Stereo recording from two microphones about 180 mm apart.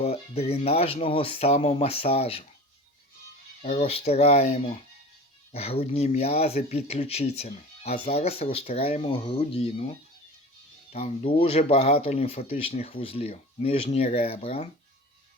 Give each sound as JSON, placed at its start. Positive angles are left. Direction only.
{"t": 0.0, "sound": "speech", "side_deg": 35}
{"t": 3.6, "sound": "speech", "side_deg": 35}
{"t": 10.9, "sound": "speech", "side_deg": 35}